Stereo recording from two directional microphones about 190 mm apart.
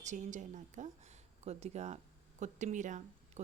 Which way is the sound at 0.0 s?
40° right (ahead or behind).